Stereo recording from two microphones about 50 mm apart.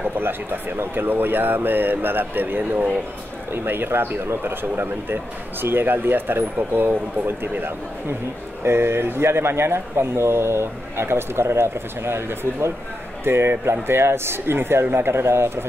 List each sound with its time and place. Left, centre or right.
0.0 s speech: right
8.6 s speech: right